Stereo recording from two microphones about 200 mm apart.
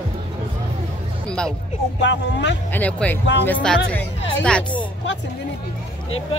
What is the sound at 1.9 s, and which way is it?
Speech, 60° left (ahead or behind).